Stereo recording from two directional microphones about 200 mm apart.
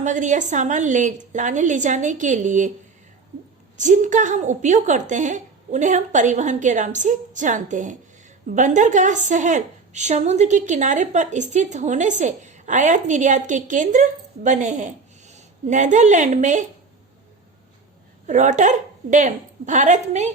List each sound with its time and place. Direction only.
0.0 s a woman's voice: 40° right (ahead or behind)
3.8 s a woman's voice: 40° right (ahead or behind)
18.3 s a woman's voice: 35° right (ahead or behind)